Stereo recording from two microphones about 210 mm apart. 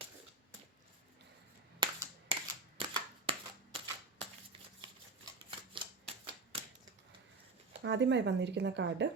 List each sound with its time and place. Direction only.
1.8 s a sound: 20° right (ahead or behind)
2.3 s camera: 25° right (ahead or behind)
4.8 s typewriter: 25° right (ahead or behind)
7.8 s speech: 55° right (ahead or behind)